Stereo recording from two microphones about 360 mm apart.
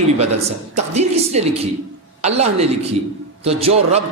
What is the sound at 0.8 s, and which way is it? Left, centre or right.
A man's voice, centre.